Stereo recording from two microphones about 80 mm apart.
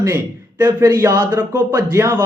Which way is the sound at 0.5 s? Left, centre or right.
Right.